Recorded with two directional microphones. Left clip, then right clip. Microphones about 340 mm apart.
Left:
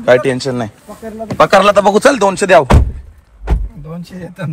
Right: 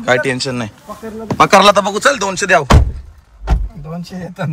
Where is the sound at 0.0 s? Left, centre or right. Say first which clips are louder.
Left 4 dB; centre.